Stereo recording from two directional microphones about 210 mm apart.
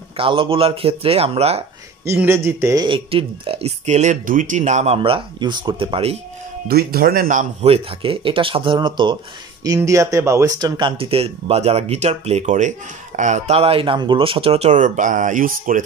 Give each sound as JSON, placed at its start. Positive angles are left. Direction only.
{"t": 0.2, "sound": "speech", "side_deg": -25}
{"t": 2.0, "sound": "speech", "side_deg": -10}
{"t": 6.7, "sound": "speech", "side_deg": -45}